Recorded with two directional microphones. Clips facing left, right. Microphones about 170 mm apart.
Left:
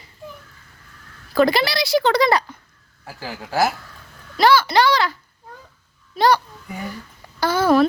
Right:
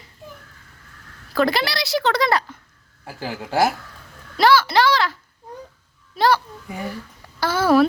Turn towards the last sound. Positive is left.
turn(degrees=-5)  # may be behind; listen again after turning